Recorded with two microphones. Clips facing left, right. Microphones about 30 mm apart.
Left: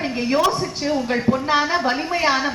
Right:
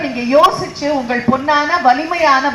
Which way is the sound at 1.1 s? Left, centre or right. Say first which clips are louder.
Right 5 dB; centre.